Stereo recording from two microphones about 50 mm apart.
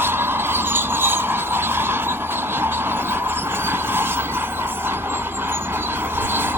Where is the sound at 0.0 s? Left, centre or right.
Right.